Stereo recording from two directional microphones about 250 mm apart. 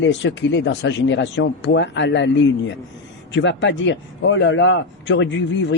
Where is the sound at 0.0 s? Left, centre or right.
Left.